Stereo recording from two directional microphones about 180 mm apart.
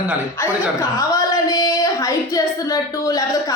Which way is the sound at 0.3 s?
15° left (ahead or behind).